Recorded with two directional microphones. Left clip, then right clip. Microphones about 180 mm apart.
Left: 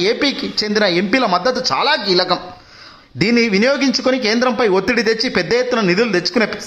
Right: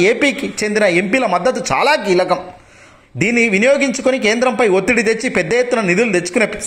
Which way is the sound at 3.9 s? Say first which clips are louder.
Right 1 dB; 15° left (ahead or behind).